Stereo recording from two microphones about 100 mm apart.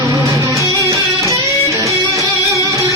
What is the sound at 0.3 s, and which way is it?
Music, 35° right (ahead or behind).